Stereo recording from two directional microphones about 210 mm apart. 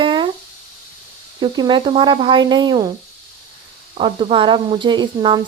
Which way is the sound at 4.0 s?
25° right (ahead or behind).